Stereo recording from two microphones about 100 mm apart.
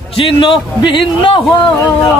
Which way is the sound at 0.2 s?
55° left (ahead or behind).